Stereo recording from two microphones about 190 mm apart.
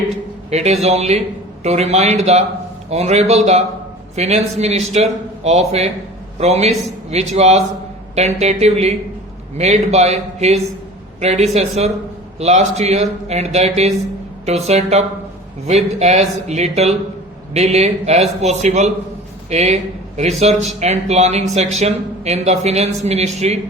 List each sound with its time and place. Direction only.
0.5 s a man's voice: 35° right (ahead or behind)